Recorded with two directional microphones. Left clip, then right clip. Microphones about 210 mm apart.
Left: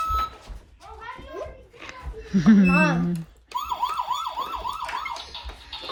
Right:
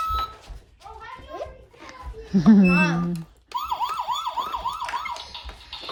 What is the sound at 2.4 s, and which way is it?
Speech, 20° right (ahead or behind).